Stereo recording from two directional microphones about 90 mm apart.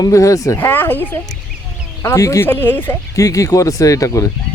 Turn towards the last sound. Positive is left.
turn(degrees=40)  # may be behind; listen again after turning